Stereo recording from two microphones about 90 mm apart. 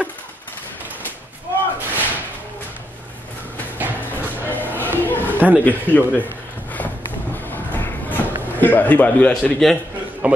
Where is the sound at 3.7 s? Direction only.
20° right (ahead or behind).